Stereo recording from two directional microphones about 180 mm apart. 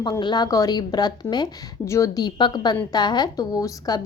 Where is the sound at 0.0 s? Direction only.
25° left (ahead or behind).